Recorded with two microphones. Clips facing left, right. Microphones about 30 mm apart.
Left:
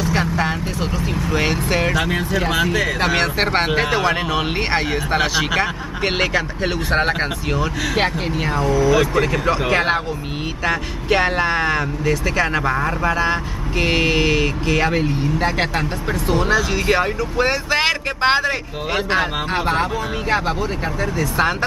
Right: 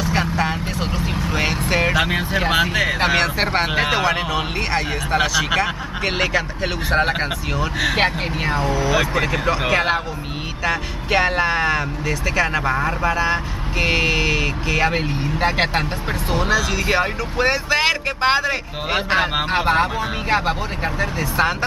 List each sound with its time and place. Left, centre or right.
0.0 s vehicle: centre
0.7 s vehicle: centre
1.3 s speech: centre; by 3.2 s right
3.2 s speech: centre
4.6 s speech: centre
5.6 s speech: centre
7.8 s speech: centre
14.9 s speech: centre
16.8 s speech: centre
17.6 s speech: centre
18.9 s speech: centre
21.4 s speech: centre